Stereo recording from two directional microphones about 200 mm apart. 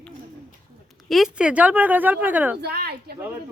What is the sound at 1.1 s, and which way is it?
Speech, 5° right (ahead or behind).